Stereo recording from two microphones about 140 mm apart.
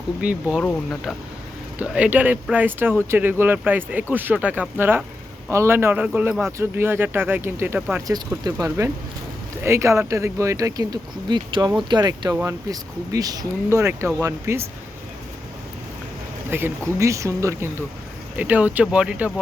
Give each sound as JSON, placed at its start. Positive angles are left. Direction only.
{"t": 0.2, "sound": "speech", "side_deg": -10}
{"t": 0.6, "sound": "speech", "side_deg": 10}
{"t": 1.8, "sound": "speech", "side_deg": -10}
{"t": 8.0, "sound": "speech", "side_deg": -25}
{"t": 16.5, "sound": "speech", "side_deg": -15}